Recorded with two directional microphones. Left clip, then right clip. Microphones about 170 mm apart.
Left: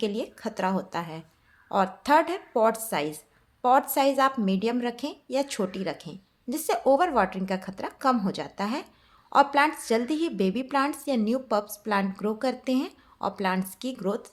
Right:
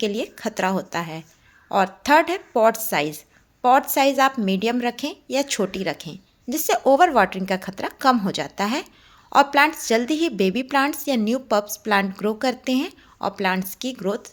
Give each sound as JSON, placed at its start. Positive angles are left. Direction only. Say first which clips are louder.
{"t": 0.0, "sound": "a woman's voice", "louder": "right 5 dB", "side_deg": -20}